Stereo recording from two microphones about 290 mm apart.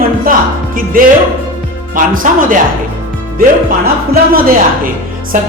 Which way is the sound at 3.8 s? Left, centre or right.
Right.